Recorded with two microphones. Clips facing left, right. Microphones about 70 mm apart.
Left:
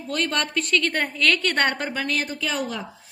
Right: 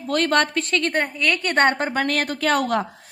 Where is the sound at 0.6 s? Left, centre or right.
Right.